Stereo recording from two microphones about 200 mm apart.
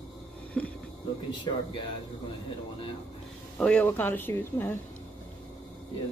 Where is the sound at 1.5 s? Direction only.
20° left (ahead or behind).